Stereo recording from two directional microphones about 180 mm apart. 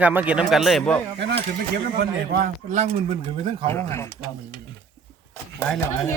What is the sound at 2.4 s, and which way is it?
Speech, 45° right (ahead or behind).